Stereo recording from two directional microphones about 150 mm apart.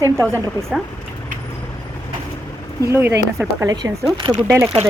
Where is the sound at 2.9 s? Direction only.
15° right (ahead or behind).